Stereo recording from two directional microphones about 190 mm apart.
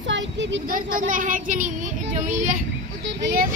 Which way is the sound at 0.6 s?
45° right (ahead or behind).